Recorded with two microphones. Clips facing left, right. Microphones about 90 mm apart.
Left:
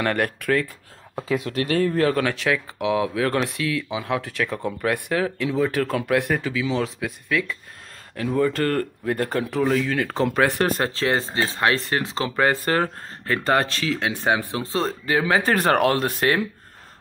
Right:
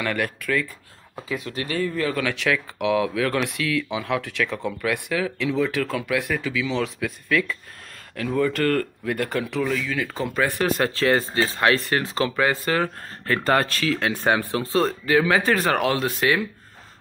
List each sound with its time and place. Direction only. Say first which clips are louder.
0.0 s speech: left 3 dB; 45° left (ahead or behind)
1.3 s speech: left 5 dB; 70° left (ahead or behind); by 2.2 s 55° left (ahead or behind)
2.2 s speech: left 1 dB; 35° left (ahead or behind)
4.5 s speech: left 1 dB; 10° left (ahead or behind)
4.8 s speech: left 2 dB; 45° left (ahead or behind)
6.4 s speech: left 1 dB; 35° left (ahead or behind)
7.2 s speech: right 2 dB; 15° left (ahead or behind)
8.4 s speech: even; 30° left (ahead or behind)
9.8 s speech: left 4 dB; 55° left (ahead or behind)
10.8 s speech: right 2 dB; 25° left (ahead or behind)
12.4 s speech: left 3 dB; 45° left (ahead or behind)
13.2 s speech: even; 20° left (ahead or behind)
15.5 s speech: left 2 dB; 50° left (ahead or behind)